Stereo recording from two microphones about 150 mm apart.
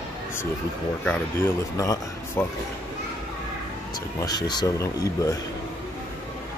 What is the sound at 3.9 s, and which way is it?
Speech, 25° left (ahead or behind).